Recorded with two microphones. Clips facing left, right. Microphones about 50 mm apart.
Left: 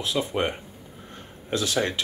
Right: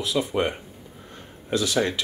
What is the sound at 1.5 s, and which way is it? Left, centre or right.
Speech, left.